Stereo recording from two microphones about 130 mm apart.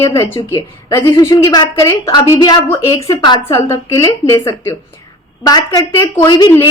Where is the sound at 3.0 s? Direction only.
35° left (ahead or behind).